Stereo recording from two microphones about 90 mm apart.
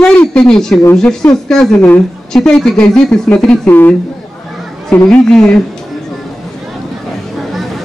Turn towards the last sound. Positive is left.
turn(degrees=0)  # may be behind; listen again after turning